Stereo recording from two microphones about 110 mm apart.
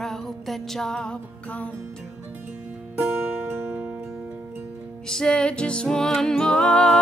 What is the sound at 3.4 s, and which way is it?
Music, 20° right (ahead or behind).